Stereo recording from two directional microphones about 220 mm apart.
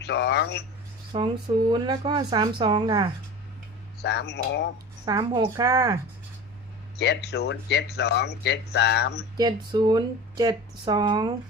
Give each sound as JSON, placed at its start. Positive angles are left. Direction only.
{"t": 0.0, "sound": "speech", "side_deg": 50}
{"t": 1.1, "sound": "speech", "side_deg": -25}
{"t": 4.0, "sound": "speech", "side_deg": 50}
{"t": 5.0, "sound": "a woman's voice", "side_deg": -15}
{"t": 6.9, "sound": "speech", "side_deg": 50}
{"t": 9.4, "sound": "speech", "side_deg": -20}